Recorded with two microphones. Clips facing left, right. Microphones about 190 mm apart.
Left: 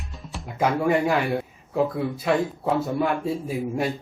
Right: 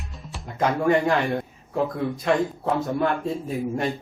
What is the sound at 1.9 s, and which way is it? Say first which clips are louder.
Speech: even; 5° left (ahead or behind).